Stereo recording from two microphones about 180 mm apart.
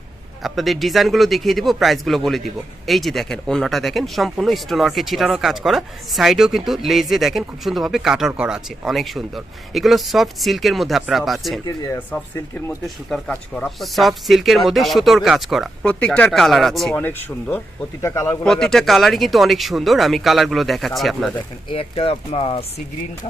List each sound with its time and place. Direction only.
0.4 s a man's voice: centre (ahead or behind)
12.6 s a man's voice: 5° left (ahead or behind)
18.4 s a man's voice: 5° left (ahead or behind)
21.7 s speech: 30° left (ahead or behind)